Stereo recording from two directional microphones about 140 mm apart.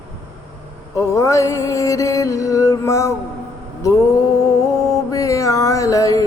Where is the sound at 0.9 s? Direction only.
20° left (ahead or behind).